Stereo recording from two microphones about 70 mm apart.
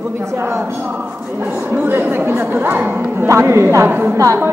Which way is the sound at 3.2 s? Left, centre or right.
Right.